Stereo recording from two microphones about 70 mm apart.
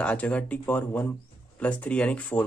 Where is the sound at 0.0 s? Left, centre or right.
Centre.